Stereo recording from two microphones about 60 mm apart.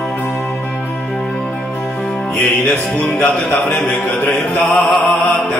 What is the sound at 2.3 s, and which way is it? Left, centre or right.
Music, left.